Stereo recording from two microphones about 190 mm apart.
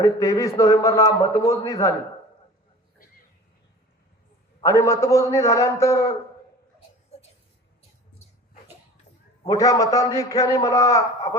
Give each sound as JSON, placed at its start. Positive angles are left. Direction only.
{"t": 0.0, "sound": "a man's voice", "side_deg": 15}
{"t": 4.6, "sound": "a man's voice", "side_deg": 15}
{"t": 9.5, "sound": "a man's voice", "side_deg": 20}